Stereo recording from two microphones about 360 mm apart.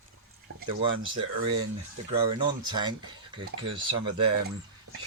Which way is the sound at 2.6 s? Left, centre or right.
Centre.